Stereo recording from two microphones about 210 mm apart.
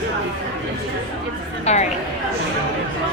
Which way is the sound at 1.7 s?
30° left (ahead or behind).